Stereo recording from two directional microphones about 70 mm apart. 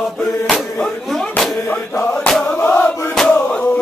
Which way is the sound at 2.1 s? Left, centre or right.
Centre.